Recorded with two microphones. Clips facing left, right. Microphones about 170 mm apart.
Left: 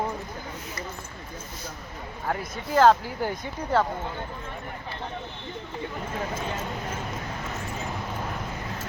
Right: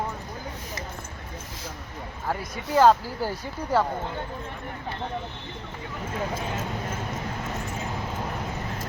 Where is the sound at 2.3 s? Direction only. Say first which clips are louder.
Even; 5° right (ahead or behind).